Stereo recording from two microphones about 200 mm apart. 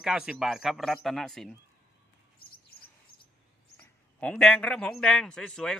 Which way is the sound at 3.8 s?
5° left (ahead or behind).